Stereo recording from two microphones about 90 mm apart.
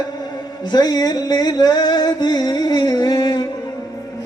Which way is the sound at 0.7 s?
50° left (ahead or behind).